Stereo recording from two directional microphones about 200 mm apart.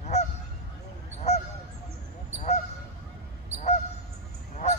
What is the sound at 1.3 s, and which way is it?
Honk, 35° left (ahead or behind).